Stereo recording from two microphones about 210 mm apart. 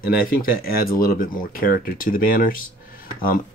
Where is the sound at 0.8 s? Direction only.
40° left (ahead or behind).